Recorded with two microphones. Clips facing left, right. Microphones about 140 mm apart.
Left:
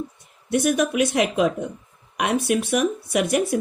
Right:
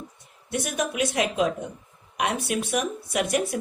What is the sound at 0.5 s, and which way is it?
Speech, 65° left (ahead or behind).